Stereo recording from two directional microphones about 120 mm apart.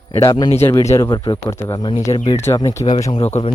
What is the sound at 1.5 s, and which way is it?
Speech, 20° left (ahead or behind).